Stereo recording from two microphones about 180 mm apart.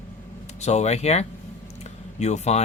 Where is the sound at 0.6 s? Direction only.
40° left (ahead or behind).